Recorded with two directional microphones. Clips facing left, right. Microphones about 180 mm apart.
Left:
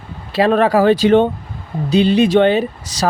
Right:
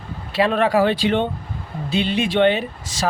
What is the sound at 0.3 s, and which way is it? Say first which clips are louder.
Speech: left 4 dB; 40° left (ahead or behind).